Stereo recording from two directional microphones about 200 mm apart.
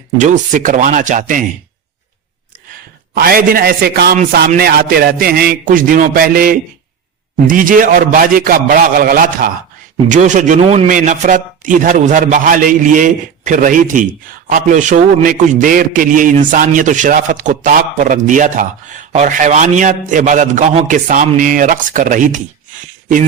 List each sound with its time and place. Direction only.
0.2 s speech: 40° right (ahead or behind)
3.2 s a man's voice: 45° right (ahead or behind)